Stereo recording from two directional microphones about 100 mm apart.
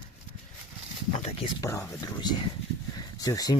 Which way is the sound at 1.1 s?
80° left.